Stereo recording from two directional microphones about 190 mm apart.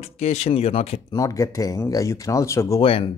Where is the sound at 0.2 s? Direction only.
35° left (ahead or behind).